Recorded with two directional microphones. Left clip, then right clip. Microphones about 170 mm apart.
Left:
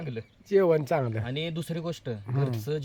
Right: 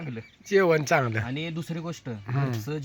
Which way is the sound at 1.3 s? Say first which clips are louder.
Left 1 dB; 45° left (ahead or behind).